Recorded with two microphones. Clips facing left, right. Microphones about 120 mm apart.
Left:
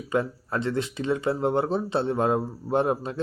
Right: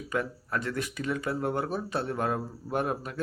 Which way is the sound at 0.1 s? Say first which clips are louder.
Left 5 dB; 25° left (ahead or behind).